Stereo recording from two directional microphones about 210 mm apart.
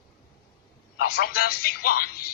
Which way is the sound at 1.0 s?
45° left (ahead or behind).